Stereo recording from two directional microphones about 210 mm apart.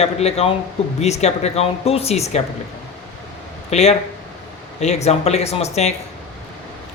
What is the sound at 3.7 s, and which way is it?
Speech, 30° left (ahead or behind).